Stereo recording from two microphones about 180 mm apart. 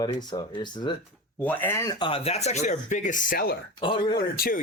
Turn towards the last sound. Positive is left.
turn(degrees=55)  # may be behind; listen again after turning